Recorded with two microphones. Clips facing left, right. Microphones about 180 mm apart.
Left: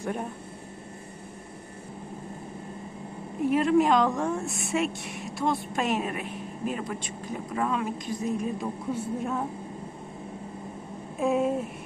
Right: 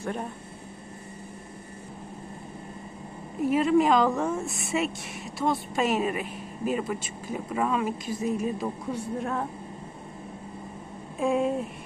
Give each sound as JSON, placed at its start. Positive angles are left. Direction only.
{"t": 0.0, "sound": "speech", "side_deg": 10}
{"t": 3.4, "sound": "a woman's voice", "side_deg": 0}
{"t": 11.2, "sound": "a woman's voice", "side_deg": 0}